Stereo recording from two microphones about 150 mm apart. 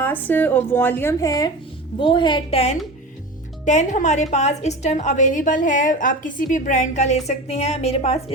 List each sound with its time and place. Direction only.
0.0 s a woman's voice: 10° left (ahead or behind); by 2.7 s 40° left (ahead or behind)
3.7 s a woman's voice: 55° left (ahead or behind)